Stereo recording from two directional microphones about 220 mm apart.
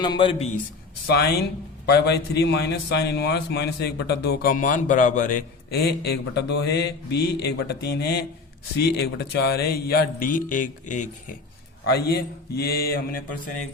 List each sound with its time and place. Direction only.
0.0 s a man's voice: 20° left (ahead or behind)
1.0 s a man's voice: 45° left (ahead or behind)
5.7 s a man's voice: 45° left (ahead or behind)
11.9 s a man's voice: 45° left (ahead or behind)